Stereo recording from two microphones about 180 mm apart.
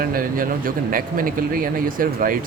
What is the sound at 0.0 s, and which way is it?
Speech, 55° right (ahead or behind).